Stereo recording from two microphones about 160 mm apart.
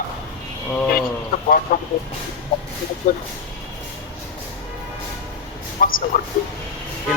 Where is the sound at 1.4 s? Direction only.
60° left (ahead or behind).